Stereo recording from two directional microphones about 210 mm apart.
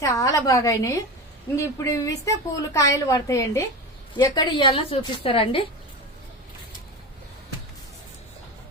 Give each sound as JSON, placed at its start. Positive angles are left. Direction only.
{"t": 0.0, "sound": "a woman's voice", "side_deg": 15}